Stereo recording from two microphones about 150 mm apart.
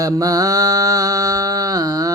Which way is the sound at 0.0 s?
25° right (ahead or behind).